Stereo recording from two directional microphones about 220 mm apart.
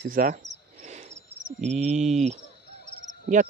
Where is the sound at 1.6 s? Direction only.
30° right (ahead or behind).